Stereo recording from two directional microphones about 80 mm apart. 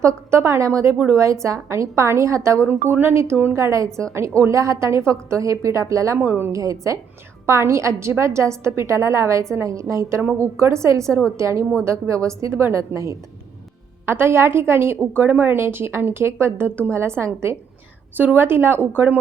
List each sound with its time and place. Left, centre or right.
0.0 s a woman's voice: right
2.6 s a woman's voice: right
6.1 s a woman's voice: right
6.5 s a woman's voice: right
18.2 s a woman's voice: right